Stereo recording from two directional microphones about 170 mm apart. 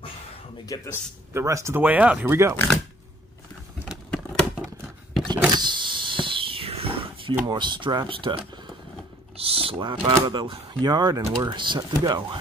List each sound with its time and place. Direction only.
0.7 s a man's voice: 20° left (ahead or behind)
1.3 s speech: 15° right (ahead or behind)
4.1 s a sound: 5° left (ahead or behind)
5.5 s a sound: 25° right (ahead or behind)
7.4 s speech: 25° right (ahead or behind)
9.4 s speech: 35° right (ahead or behind)